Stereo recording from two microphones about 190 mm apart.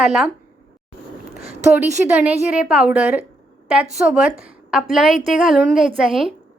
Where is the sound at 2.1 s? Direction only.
5° right (ahead or behind).